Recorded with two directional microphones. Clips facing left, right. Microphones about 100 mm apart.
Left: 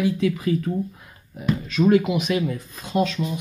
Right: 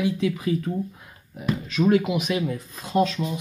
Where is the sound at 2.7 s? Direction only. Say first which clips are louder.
Right 1 dB; 35° right (ahead or behind).